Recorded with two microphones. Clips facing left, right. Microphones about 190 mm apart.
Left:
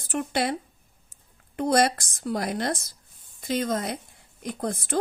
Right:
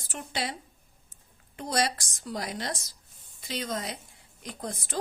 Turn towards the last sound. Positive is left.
turn(degrees=55)  # may be behind; listen again after turning